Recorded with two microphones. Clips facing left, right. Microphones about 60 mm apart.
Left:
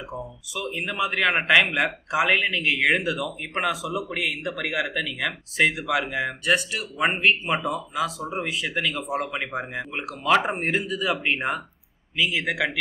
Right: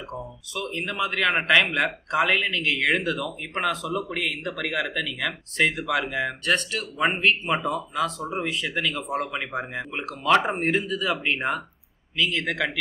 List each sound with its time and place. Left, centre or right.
0.1 s speech: centre